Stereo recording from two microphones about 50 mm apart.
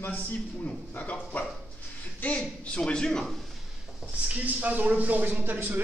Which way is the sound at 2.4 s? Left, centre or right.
Centre.